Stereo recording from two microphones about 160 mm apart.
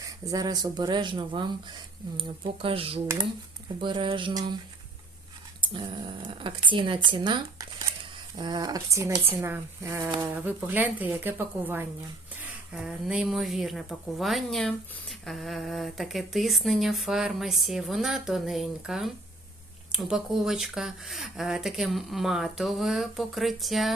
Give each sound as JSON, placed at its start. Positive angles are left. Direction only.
{"t": 0.0, "sound": "speech", "side_deg": -20}
{"t": 5.5, "sound": "speech", "side_deg": -30}